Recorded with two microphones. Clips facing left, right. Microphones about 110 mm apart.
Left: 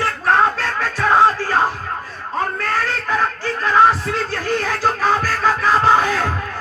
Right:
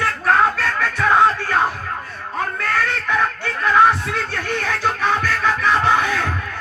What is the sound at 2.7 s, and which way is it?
Music, 30° left (ahead or behind).